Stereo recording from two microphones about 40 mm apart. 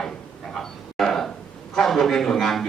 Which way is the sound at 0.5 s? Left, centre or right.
Centre.